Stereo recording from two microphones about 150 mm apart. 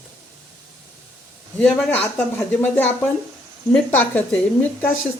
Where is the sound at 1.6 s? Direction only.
10° left (ahead or behind).